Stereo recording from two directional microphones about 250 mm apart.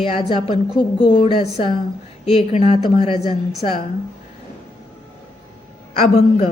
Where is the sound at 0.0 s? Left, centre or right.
Left.